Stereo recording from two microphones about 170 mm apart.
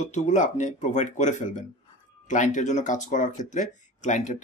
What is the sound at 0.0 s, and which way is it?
Speech, 45° left (ahead or behind).